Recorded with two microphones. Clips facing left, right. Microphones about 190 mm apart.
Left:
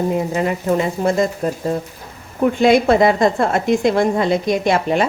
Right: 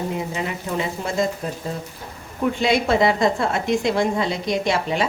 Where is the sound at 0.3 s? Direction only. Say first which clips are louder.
Left 8 dB; 50° left (ahead or behind).